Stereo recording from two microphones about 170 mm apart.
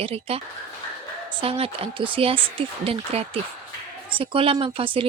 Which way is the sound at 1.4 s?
35° right (ahead or behind).